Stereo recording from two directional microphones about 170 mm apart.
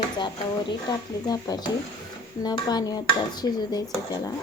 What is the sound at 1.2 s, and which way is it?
Dishes, 20° left (ahead or behind).